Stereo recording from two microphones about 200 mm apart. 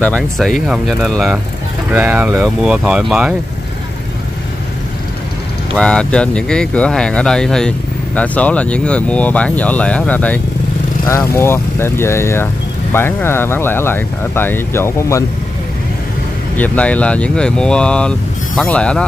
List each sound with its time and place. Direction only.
0.0 s speech: 5° left (ahead or behind)
5.8 s speech: 5° left (ahead or behind)
16.5 s speech: 10° left (ahead or behind)